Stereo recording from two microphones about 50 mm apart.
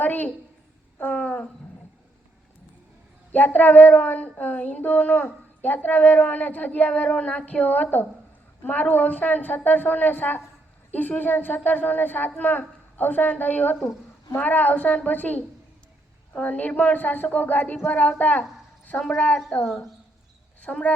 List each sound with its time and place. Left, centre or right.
0.0 s a woman's voice: left
1.1 s wild animals: left
3.3 s a woman's voice: left
18.9 s a woman's voice: left